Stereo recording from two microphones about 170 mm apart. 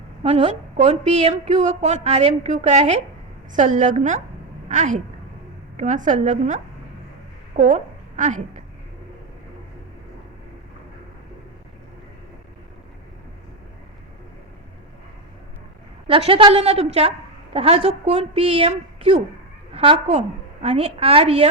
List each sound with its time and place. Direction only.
0.2 s a woman's voice: 35° right (ahead or behind)
16.0 s a woman's voice: 35° right (ahead or behind)